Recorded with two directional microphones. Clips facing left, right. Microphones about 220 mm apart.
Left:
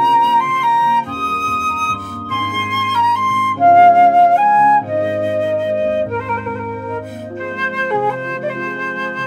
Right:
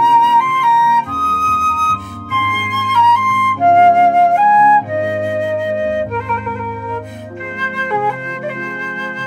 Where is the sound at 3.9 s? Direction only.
20° left (ahead or behind).